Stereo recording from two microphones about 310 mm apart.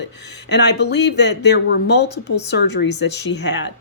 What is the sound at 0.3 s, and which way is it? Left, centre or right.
A woman's voice, left.